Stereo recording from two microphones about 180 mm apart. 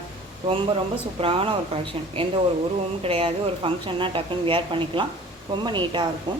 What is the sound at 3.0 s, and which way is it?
Speech, 30° right (ahead or behind).